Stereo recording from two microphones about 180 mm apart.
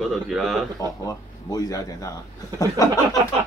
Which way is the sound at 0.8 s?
20° left (ahead or behind).